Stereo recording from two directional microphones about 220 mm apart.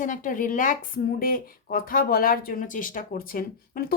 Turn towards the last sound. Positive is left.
turn(degrees=40)  # may be behind; listen again after turning